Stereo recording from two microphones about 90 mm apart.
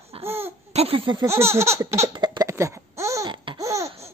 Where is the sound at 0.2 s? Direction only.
25° right (ahead or behind).